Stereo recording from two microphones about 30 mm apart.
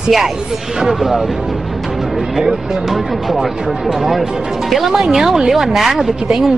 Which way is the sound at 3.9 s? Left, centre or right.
Centre.